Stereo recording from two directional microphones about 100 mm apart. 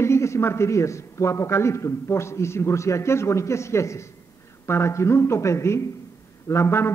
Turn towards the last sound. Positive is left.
turn(degrees=25)  # may be behind; listen again after turning